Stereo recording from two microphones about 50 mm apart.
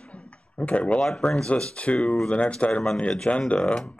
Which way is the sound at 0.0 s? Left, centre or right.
Left.